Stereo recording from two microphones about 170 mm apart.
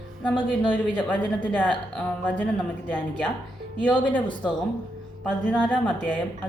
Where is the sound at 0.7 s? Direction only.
10° left (ahead or behind).